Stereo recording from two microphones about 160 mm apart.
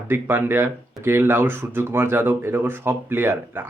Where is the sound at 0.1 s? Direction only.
15° right (ahead or behind).